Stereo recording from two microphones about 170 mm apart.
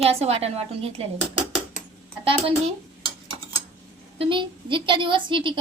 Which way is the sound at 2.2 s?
30° right (ahead or behind).